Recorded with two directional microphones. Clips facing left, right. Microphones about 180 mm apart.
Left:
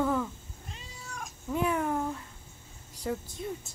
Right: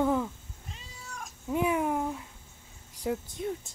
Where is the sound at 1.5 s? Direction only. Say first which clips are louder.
Right 1 dB; 15° right (ahead or behind).